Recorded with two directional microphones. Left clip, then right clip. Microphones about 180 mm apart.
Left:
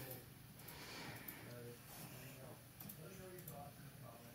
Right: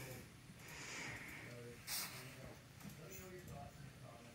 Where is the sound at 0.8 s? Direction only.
10° left (ahead or behind).